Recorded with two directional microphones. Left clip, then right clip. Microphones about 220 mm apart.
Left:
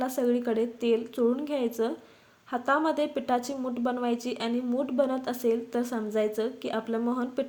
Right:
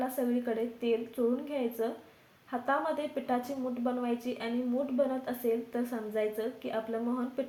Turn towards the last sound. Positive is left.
turn(degrees=50)  # may be behind; listen again after turning